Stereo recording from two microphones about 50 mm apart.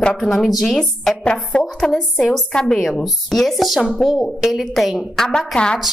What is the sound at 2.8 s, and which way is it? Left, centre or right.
A woman's voice, centre.